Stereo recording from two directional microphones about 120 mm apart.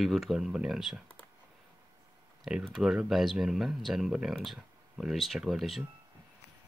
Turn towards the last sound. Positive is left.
turn(degrees=0)  # may be behind; listen again after turning